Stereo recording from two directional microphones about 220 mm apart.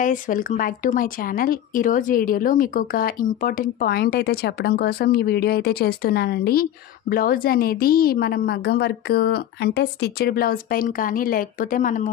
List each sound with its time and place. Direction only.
0.0 s a woman's voice: 35° left (ahead or behind)